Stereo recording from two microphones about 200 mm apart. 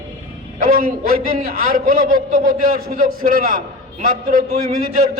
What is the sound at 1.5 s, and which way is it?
A man's voice, 45° right (ahead or behind).